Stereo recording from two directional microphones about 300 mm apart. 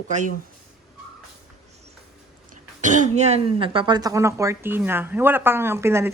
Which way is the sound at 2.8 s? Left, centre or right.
Right.